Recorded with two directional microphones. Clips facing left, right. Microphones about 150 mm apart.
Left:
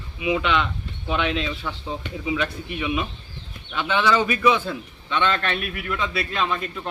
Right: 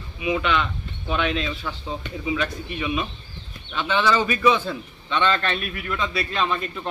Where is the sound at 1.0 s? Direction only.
20° left (ahead or behind).